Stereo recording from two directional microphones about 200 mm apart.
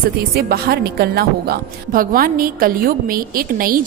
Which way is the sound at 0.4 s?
50° right (ahead or behind).